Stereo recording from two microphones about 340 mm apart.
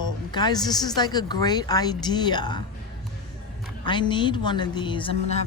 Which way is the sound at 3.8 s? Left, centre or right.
Centre.